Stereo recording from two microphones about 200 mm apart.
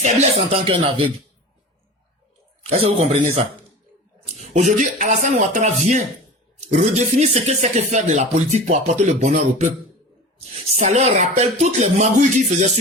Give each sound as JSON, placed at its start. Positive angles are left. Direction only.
{"t": 0.0, "sound": "speech", "side_deg": -35}
{"t": 2.6, "sound": "a man's voice", "side_deg": -30}
{"t": 4.4, "sound": "speech", "side_deg": -35}
{"t": 10.7, "sound": "speech", "side_deg": -35}